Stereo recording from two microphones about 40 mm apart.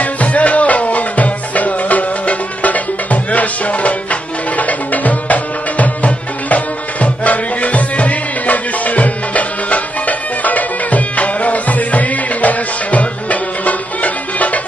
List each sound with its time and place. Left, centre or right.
0.0 s music: left